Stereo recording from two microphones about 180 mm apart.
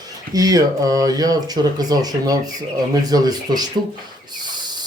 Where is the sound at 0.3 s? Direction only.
20° right (ahead or behind).